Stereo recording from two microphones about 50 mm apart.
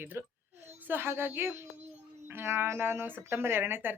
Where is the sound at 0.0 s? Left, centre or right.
Right.